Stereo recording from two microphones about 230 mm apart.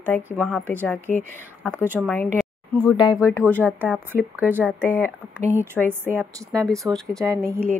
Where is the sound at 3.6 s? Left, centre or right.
Centre.